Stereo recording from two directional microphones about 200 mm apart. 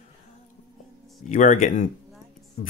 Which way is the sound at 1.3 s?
40° left (ahead or behind).